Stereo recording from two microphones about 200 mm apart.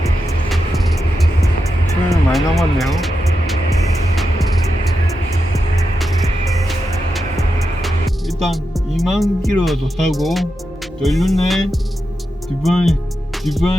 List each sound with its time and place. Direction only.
2.0 s music: centre (ahead or behind)
6.7 s music: centre (ahead or behind)
12.6 s speech: centre (ahead or behind)